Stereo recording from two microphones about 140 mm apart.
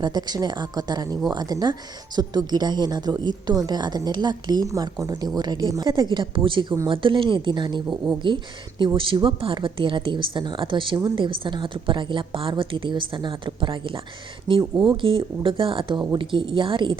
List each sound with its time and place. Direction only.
0.0 s a woman's voice: 30° right (ahead or behind)